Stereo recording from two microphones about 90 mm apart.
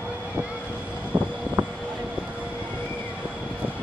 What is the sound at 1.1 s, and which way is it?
Vehicle, 20° right (ahead or behind).